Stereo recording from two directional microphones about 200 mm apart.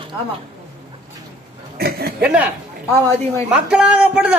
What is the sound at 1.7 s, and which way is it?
Speech, 50° right (ahead or behind).